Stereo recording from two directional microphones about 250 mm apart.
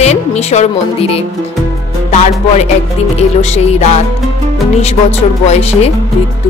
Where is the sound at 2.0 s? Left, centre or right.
Left.